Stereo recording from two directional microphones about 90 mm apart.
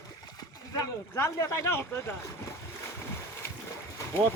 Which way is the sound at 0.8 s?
35° left (ahead or behind).